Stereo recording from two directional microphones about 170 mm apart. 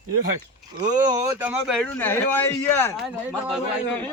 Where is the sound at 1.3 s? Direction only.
10° right (ahead or behind).